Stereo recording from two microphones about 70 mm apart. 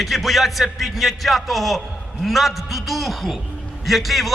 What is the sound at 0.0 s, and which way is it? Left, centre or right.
A man's voice, centre.